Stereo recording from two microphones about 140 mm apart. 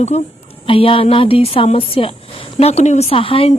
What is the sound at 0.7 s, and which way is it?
Speech, 40° left (ahead or behind).